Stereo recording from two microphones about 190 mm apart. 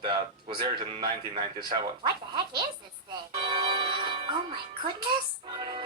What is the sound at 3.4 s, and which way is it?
Music, 25° right (ahead or behind).